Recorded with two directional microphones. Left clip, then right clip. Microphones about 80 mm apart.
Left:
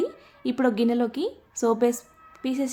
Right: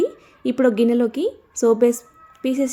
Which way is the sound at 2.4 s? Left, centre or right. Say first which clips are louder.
Right 7 dB; right.